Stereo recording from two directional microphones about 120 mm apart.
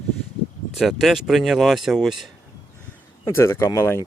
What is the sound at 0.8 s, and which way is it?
Speech, centre (ahead or behind).